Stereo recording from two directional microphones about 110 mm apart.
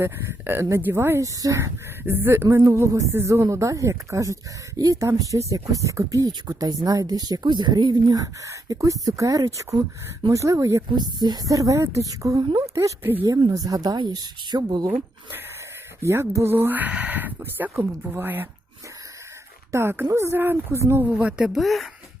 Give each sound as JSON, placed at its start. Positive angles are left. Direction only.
{"t": 0.0, "sound": "speech", "side_deg": -20}
{"t": 13.2, "sound": "speech", "side_deg": -30}
{"t": 16.0, "sound": "speech", "side_deg": -25}
{"t": 19.7, "sound": "speech", "side_deg": -20}
{"t": 21.0, "sound": "speech", "side_deg": -10}